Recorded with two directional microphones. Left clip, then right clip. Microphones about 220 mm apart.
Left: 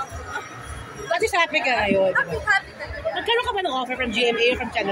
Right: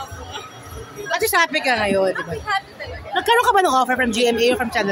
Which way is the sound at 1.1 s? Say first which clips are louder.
Right 2 dB; 25° right (ahead or behind).